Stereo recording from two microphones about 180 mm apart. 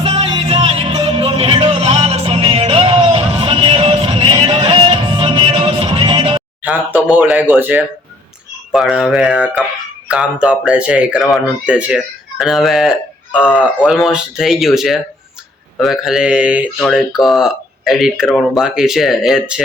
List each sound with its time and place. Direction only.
0.0 s music: 30° right (ahead or behind)
6.6 s speech: 10° right (ahead or behind)